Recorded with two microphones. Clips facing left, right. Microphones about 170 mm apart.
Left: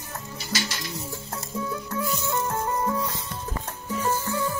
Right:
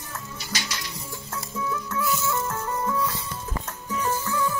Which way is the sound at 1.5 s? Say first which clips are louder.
Even; 35° left (ahead or behind).